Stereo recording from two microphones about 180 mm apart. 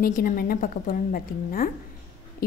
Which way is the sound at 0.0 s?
50° left (ahead or behind).